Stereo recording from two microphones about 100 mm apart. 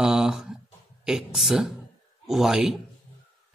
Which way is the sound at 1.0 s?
5° right (ahead or behind).